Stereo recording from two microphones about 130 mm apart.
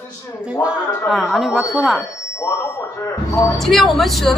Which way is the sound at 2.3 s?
20° left (ahead or behind).